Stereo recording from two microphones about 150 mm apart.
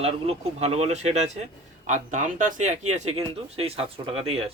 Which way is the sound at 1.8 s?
55° right (ahead or behind).